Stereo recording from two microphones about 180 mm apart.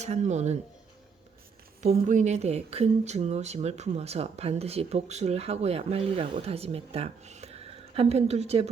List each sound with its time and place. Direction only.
0.0 s speech: 40° right (ahead or behind)
1.8 s speech: 40° right (ahead or behind)